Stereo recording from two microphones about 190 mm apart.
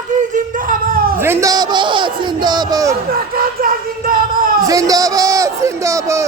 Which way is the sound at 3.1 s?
50° right (ahead or behind).